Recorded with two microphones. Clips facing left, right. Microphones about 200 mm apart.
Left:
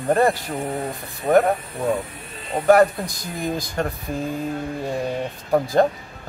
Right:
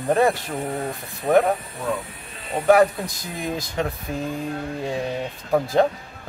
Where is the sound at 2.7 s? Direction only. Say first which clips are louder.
Left 1 dB; centre (ahead or behind).